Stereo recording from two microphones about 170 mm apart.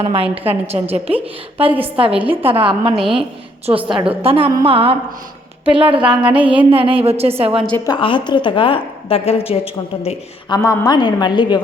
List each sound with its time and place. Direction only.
0.0 s a woman's voice: 35° right (ahead or behind)
6.0 s speech: 5° right (ahead or behind)
6.4 s a sound: 10° right (ahead or behind)
6.7 s a woman's voice: 35° right (ahead or behind)
7.9 s a woman's voice: 30° left (ahead or behind)
10.5 s a woman's voice: 20° left (ahead or behind)